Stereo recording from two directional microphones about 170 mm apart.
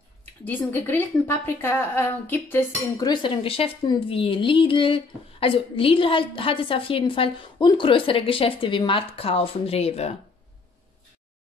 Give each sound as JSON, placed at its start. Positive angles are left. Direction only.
{"t": 0.2, "sound": "speech", "side_deg": 10}
{"t": 3.1, "sound": "a woman's voice", "side_deg": 30}